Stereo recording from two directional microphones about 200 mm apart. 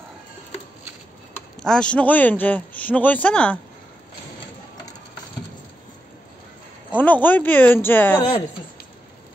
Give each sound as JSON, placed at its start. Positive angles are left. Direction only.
{"t": 1.6, "sound": "a man's voice", "side_deg": 5}
{"t": 7.0, "sound": "a man's voice", "side_deg": 10}